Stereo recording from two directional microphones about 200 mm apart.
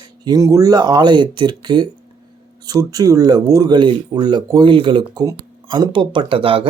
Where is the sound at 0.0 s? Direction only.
20° right (ahead or behind).